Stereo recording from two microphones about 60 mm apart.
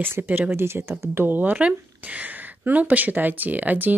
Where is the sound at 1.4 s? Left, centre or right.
Right.